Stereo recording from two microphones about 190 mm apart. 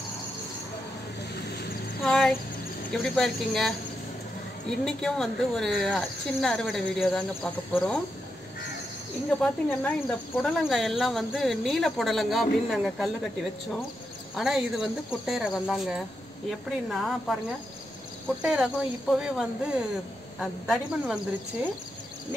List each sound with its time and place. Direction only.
1.3 s a sound: 55° left (ahead or behind)
2.0 s a sound: 5° left (ahead or behind)
2.9 s speech: centre (ahead or behind)
9.3 s speech: 5° left (ahead or behind)
14.3 s speech: centre (ahead or behind)
18.4 s speech: 5° right (ahead or behind)